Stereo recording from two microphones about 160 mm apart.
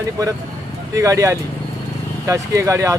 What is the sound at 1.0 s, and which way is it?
Speech, 20° right (ahead or behind).